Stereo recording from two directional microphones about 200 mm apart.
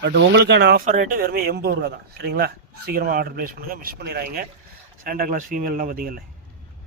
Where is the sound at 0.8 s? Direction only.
40° right (ahead or behind).